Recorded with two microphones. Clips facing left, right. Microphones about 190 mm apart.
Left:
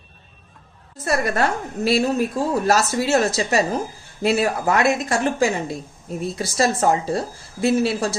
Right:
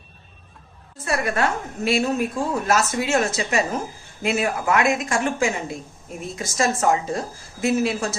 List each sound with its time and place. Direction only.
1.0 s a woman's voice: 40° left (ahead or behind)